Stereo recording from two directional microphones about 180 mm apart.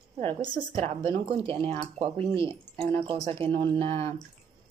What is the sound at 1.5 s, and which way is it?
Speech, 30° right (ahead or behind).